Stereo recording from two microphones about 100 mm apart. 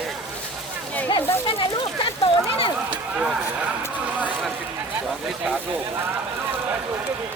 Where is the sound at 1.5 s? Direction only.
60° left (ahead or behind).